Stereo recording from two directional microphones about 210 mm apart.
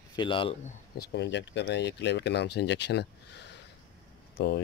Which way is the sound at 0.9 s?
50° left (ahead or behind).